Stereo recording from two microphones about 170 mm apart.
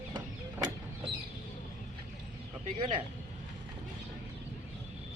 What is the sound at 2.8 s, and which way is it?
Vehicle, 30° right (ahead or behind).